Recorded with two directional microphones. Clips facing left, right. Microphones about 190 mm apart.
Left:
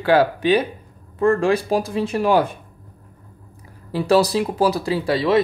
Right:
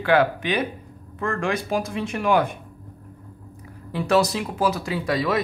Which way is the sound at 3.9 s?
35° left (ahead or behind).